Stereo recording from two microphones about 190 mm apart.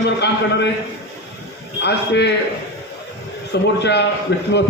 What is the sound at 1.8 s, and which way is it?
Speech, 65° left (ahead or behind).